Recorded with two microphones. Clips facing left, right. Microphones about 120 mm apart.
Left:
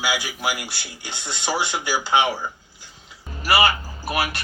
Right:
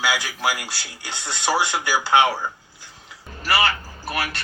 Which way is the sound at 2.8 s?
15° left (ahead or behind).